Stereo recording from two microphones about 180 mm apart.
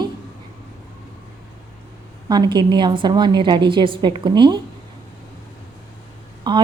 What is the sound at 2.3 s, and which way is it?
A woman's voice, 25° right (ahead or behind).